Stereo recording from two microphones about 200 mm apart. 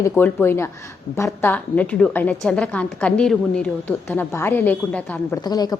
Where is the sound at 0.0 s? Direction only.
10° left (ahead or behind).